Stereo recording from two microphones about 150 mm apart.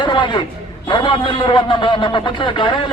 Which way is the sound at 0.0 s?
30° left (ahead or behind).